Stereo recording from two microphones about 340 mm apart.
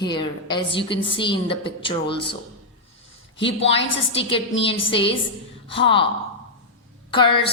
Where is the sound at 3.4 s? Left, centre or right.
Centre.